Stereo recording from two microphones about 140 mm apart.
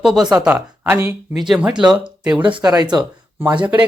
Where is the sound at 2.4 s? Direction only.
30° right (ahead or behind).